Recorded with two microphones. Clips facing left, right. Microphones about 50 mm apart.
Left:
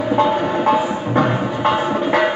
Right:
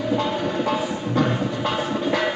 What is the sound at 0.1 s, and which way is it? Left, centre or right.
Music, left.